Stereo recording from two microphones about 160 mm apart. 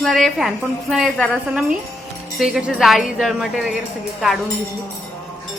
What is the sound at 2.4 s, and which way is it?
A woman's voice, 5° right (ahead or behind).